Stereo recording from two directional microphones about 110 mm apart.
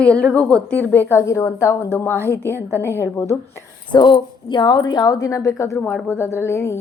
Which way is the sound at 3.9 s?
45° left (ahead or behind).